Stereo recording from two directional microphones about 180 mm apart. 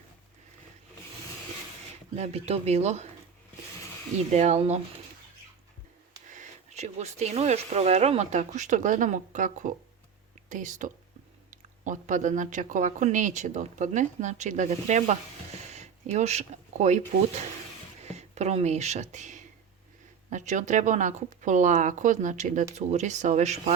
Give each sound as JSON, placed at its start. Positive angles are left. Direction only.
{"t": 2.1, "sound": "speech", "side_deg": -35}
{"t": 4.3, "sound": "speech", "side_deg": -40}
{"t": 6.3, "sound": "speech", "side_deg": -40}